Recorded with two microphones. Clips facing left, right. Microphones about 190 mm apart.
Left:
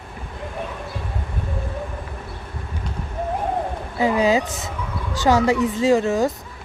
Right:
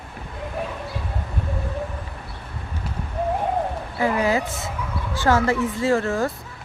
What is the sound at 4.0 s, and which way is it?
Speech, 15° left (ahead or behind).